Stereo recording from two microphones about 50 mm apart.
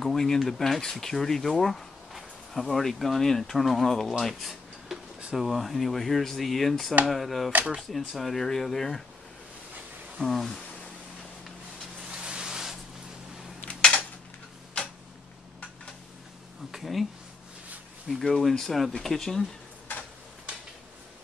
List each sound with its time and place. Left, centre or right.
0.0 s speech: centre
4.2 s a sound: centre
5.3 s speech: centre
10.1 s speech: centre
12.0 s vehicle: centre
13.7 s a sound: left
16.7 s speech: centre
18.2 s speech: centre